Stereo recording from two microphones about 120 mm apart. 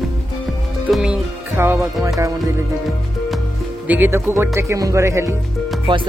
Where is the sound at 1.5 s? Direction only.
20° right (ahead or behind).